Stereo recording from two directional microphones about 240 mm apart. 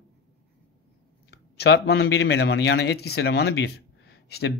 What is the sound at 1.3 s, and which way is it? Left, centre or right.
Speech, left.